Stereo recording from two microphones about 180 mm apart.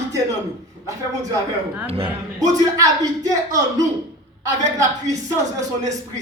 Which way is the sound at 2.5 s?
20° right (ahead or behind).